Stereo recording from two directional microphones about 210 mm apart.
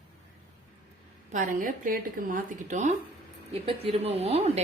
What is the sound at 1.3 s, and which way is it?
A woman's voice, 40° right (ahead or behind).